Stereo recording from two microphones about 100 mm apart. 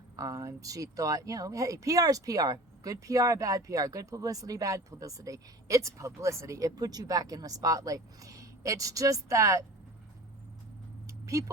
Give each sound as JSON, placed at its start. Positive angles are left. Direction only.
{"t": 0.2, "sound": "speech", "side_deg": -35}
{"t": 11.0, "sound": "vehicle", "side_deg": -35}